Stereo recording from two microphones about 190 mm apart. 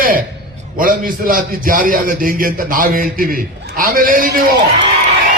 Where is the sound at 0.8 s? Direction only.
45° right (ahead or behind).